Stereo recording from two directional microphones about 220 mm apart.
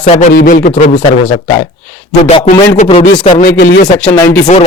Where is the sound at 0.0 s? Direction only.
35° left (ahead or behind).